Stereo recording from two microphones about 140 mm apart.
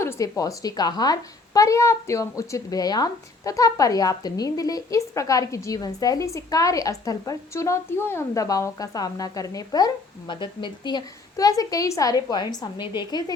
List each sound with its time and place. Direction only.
0.0 s a woman's voice: 20° left (ahead or behind)